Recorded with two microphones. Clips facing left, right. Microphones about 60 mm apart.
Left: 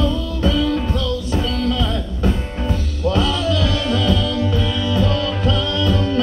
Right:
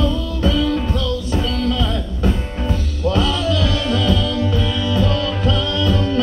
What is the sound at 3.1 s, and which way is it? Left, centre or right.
Music, left.